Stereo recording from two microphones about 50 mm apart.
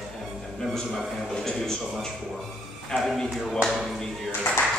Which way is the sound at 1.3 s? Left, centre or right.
Centre.